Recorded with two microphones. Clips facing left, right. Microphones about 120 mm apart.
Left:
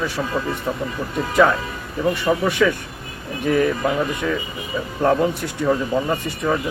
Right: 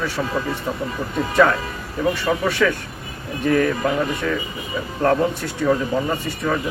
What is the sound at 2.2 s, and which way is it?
Speech, 15° left (ahead or behind).